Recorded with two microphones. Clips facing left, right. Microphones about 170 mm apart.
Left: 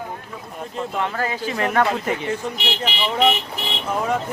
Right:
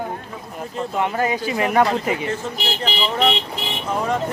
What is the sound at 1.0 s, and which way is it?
Speech, 15° right (ahead or behind).